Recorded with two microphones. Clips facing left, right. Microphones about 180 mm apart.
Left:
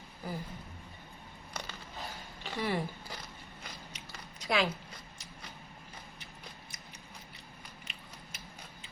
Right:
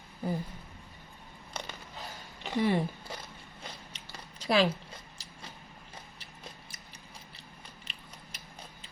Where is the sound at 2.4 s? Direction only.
20° right (ahead or behind).